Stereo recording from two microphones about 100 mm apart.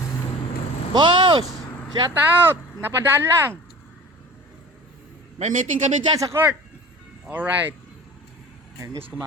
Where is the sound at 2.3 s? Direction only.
20° right (ahead or behind).